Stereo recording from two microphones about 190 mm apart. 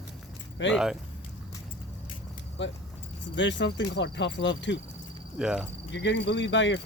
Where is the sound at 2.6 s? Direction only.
70° left (ahead or behind).